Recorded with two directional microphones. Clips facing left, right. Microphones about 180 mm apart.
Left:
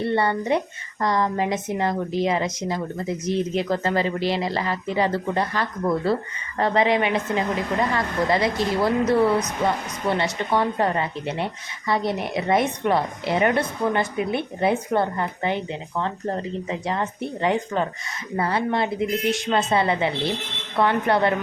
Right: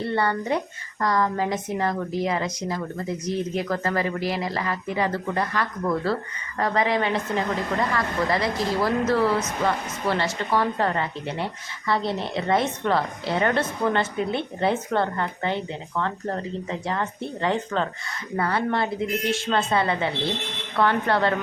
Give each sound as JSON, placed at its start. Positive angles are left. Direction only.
{"t": 0.0, "sound": "a woman's voice", "side_deg": 25}